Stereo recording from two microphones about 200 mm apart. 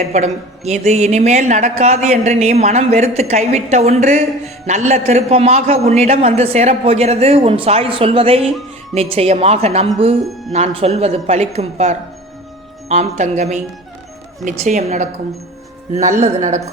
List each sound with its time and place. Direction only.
0.0 s speech: 35° right (ahead or behind)
10.2 s speech: centre (ahead or behind)
10.5 s speech: 30° right (ahead or behind)